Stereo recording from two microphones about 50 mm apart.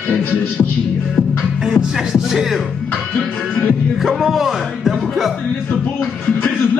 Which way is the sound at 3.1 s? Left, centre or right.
Left.